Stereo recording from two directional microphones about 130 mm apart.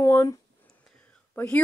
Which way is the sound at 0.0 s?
20° left (ahead or behind).